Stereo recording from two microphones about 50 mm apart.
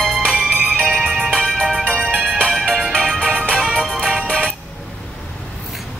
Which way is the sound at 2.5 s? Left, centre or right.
Centre.